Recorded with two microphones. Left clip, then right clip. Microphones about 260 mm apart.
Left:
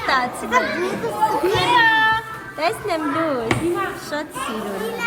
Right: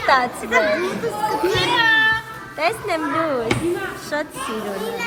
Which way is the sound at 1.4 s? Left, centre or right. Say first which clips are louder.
Left 1 dB; left.